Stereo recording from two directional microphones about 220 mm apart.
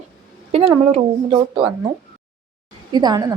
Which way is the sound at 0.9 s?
25° right (ahead or behind).